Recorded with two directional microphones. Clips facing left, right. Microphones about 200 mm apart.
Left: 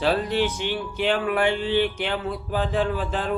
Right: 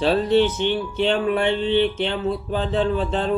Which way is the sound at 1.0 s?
25° right (ahead or behind).